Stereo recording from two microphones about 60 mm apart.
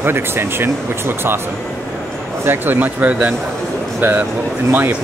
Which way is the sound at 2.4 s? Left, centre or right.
Right.